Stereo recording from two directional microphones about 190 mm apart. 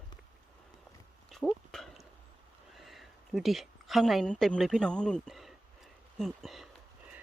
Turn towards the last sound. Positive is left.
turn(degrees=0)  # may be behind; listen again after turning